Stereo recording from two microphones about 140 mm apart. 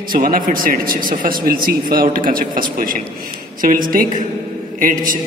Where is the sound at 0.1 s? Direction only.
85° right.